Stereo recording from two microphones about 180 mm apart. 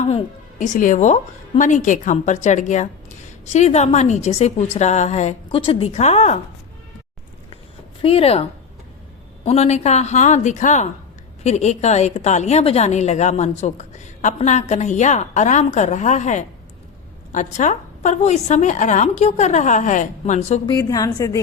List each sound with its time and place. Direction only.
0.6 s a woman's voice: 45° left (ahead or behind)
8.0 s a woman's voice: 35° left (ahead or behind)
20.7 s a woman's voice: 20° left (ahead or behind)